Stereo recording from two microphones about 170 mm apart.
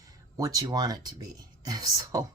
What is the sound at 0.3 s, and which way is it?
Speech, 20° right (ahead or behind).